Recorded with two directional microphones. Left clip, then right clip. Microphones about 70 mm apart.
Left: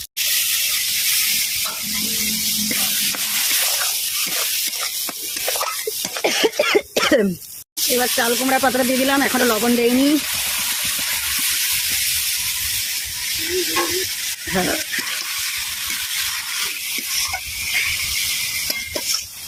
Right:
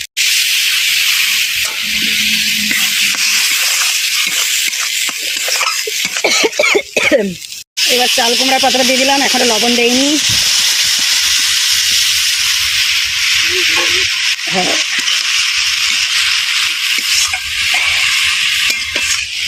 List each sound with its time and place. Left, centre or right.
6.2 s a sound: centre
6.7 s cough: centre
8.4 s speech: centre
9.3 s speech: centre